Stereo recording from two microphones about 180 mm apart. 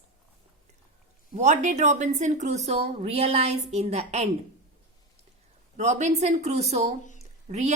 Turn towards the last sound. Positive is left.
turn(degrees=-40)  # may be behind; listen again after turning